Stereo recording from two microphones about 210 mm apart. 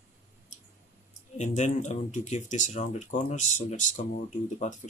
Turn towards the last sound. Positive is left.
turn(degrees=35)  # may be behind; listen again after turning